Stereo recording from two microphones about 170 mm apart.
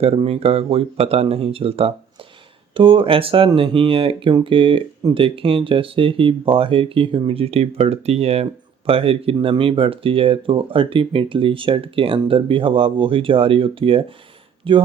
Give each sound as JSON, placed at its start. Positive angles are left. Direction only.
{"t": 0.0, "sound": "speech", "side_deg": -35}